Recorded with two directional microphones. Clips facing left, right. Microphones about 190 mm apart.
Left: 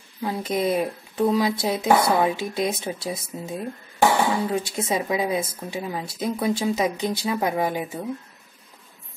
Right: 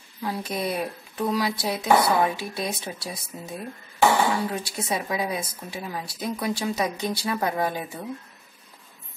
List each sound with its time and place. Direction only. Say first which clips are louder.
0.2 s a woman's voice: left 4 dB; 20° left (ahead or behind)